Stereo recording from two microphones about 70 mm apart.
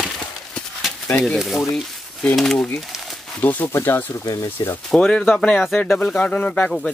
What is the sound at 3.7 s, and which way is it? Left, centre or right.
Speech, left.